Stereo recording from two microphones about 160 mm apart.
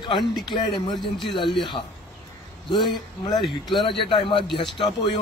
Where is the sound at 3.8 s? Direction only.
30° left (ahead or behind).